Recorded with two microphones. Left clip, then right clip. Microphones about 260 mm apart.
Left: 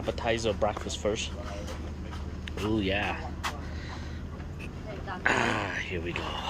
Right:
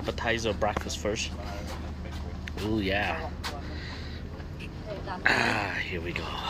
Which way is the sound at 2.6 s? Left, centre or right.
Centre.